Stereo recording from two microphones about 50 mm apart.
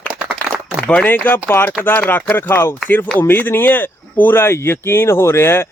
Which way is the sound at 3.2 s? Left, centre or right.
Left.